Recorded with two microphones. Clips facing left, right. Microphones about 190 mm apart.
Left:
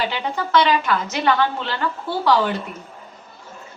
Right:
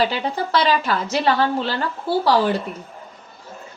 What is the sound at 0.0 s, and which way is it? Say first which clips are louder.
A woman's voice: right 3 dB; 35° right (ahead or behind).